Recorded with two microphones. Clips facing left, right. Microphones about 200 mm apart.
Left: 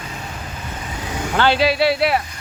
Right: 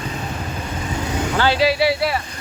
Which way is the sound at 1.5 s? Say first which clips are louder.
Even; 60° left (ahead or behind).